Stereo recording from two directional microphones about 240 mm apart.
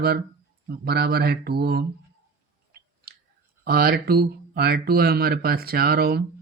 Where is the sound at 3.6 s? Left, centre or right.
Right.